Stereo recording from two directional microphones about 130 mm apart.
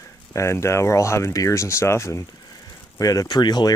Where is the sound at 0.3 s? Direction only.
20° left (ahead or behind).